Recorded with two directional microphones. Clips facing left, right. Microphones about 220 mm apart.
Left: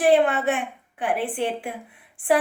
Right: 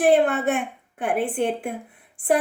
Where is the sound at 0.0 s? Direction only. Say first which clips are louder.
Even; 45° right (ahead or behind).